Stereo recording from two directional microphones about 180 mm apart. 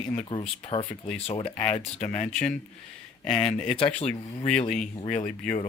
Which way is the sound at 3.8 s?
30° left (ahead or behind).